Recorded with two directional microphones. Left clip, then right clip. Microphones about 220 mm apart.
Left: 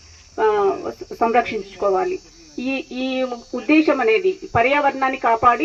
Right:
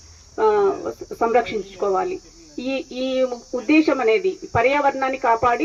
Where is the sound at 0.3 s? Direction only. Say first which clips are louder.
Even; 40° left (ahead or behind).